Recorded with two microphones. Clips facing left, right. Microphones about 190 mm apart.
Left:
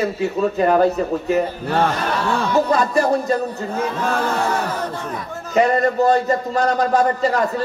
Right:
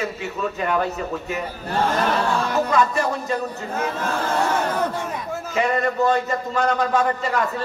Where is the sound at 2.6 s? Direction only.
35° left (ahead or behind).